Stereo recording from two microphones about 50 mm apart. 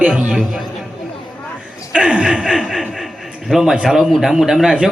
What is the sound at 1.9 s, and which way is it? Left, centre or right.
Speech, centre.